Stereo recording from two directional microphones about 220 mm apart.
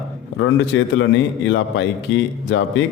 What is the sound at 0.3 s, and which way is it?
A man's voice, 55° left (ahead or behind).